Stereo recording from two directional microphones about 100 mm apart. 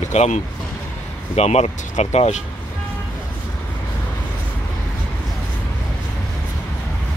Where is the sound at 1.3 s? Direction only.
90° left.